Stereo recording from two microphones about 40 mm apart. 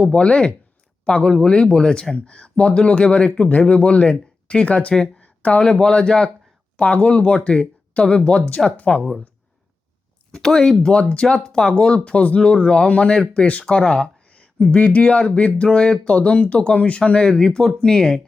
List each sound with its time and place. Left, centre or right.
0.0 s speech: left
5.2 s a sound: left
5.8 s speech: left
6.8 s speech: left
10.3 s speech: centre
10.9 s speech: left
15.6 s speech: centre
16.0 s speech: left; by 18.2 s centre